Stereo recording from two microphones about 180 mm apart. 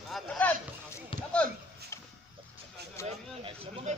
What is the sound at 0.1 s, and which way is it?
Rowboat, 5° left (ahead or behind).